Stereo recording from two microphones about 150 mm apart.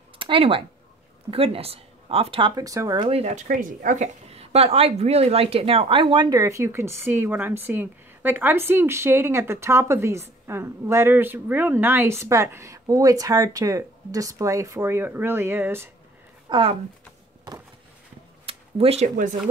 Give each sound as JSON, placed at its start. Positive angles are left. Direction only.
{"t": 0.2, "sound": "speech", "side_deg": -35}
{"t": 2.5, "sound": "speech", "side_deg": -20}
{"t": 3.1, "sound": "speech", "side_deg": -45}
{"t": 3.4, "sound": "a woman's voice", "side_deg": -60}
{"t": 16.4, "sound": "speech", "side_deg": -35}
{"t": 18.4, "sound": "a sound", "side_deg": -40}